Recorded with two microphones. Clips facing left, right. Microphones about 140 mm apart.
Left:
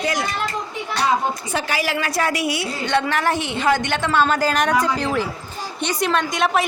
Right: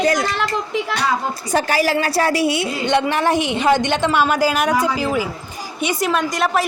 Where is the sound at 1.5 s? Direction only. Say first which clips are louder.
Right 10 dB; 40° right (ahead or behind).